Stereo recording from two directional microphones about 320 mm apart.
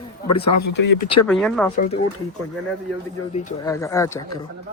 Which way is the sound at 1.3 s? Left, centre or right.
Centre.